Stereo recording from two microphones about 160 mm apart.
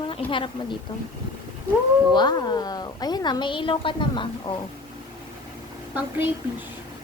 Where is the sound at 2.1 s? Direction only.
25° left (ahead or behind).